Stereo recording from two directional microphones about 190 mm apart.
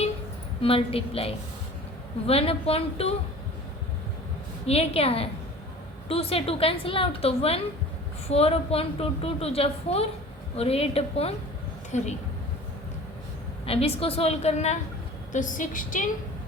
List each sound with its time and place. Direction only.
0.6 s a woman's voice: 30° left (ahead or behind)
4.6 s a woman's voice: 30° left (ahead or behind)
13.7 s a woman's voice: 30° left (ahead or behind)